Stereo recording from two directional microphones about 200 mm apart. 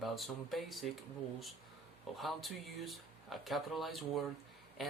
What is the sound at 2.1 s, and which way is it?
Speech, centre (ahead or behind).